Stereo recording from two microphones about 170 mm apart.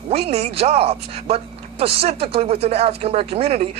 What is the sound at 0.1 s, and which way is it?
Speech, 35° right (ahead or behind).